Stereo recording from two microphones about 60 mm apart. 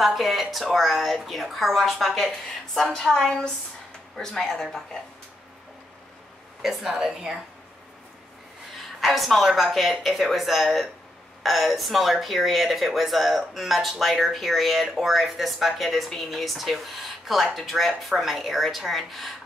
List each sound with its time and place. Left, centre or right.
0.0 s a woman's voice: centre
6.6 s a woman's voice: centre
8.7 s a sound: centre
9.6 s speech: centre